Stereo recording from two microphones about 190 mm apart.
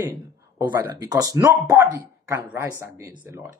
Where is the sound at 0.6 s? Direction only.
15° right (ahead or behind).